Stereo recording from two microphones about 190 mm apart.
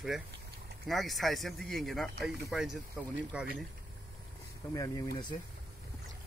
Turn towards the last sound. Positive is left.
turn(degrees=20)  # may be behind; listen again after turning